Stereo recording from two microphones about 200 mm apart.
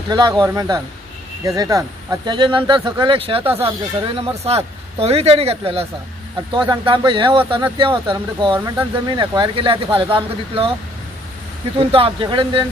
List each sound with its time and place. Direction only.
0.1 s speech: 20° right (ahead or behind)
8.5 s speech: 10° right (ahead or behind)
9.1 s speech: 20° right (ahead or behind)
11.8 s speech: 25° right (ahead or behind)